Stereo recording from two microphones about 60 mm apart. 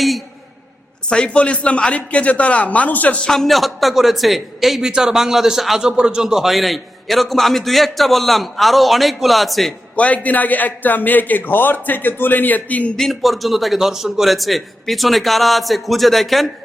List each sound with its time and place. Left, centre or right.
1.1 s a man's voice: centre
3.2 s a man's voice: centre
9.9 s a man's voice: left
13.0 s a man's voice: centre